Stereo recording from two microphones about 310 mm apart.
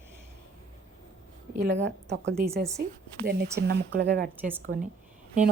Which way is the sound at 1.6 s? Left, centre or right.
Right.